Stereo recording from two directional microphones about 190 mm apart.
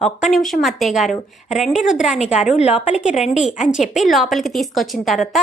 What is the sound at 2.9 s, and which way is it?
A woman's voice, 5° right (ahead or behind).